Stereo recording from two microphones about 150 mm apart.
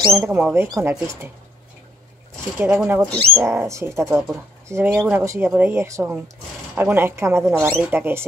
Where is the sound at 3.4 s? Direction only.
20° right (ahead or behind).